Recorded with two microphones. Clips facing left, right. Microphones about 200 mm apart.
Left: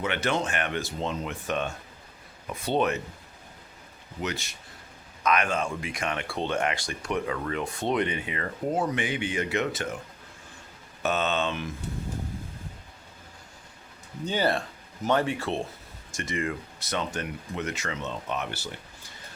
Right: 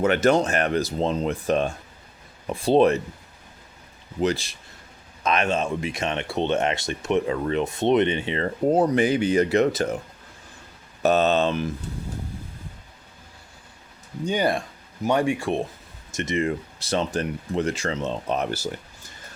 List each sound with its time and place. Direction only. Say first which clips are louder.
0.0 s speech: right 9 dB; 40° right (ahead or behind)
4.2 s speech: right 9 dB; 30° right (ahead or behind)
11.0 s speech: right 8 dB; 35° right (ahead or behind)
14.3 s speech: right 3 dB; 15° right (ahead or behind); by 19.1 s 40° right (ahead or behind)